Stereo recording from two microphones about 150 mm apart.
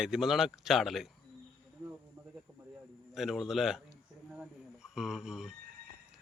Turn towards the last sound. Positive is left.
turn(degrees=-5)  # may be behind; listen again after turning